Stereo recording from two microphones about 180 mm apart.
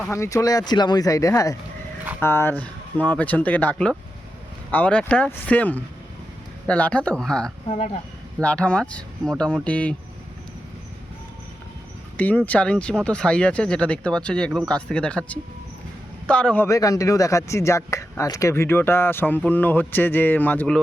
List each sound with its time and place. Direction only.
0.1 s speech: 15° left (ahead or behind)
12.1 s a man's voice: 10° left (ahead or behind)
16.6 s speech: 20° left (ahead or behind)